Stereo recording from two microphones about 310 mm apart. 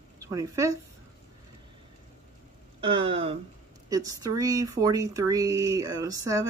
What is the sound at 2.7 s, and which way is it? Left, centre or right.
Speech, centre.